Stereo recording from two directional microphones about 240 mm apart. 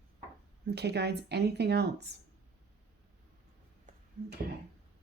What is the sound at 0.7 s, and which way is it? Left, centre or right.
Speech, right.